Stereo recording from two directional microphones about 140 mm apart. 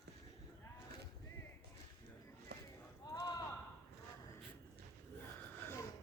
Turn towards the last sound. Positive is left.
turn(degrees=15)  # may be behind; listen again after turning